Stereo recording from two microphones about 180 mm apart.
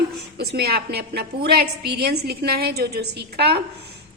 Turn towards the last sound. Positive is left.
turn(degrees=-65)  # may be behind; listen again after turning